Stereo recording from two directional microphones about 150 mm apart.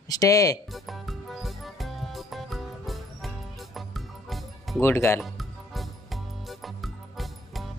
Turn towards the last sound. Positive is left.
turn(degrees=0)  # may be behind; listen again after turning